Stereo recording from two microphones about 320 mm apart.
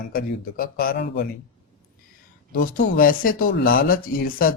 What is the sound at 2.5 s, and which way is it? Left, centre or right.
Speech, left.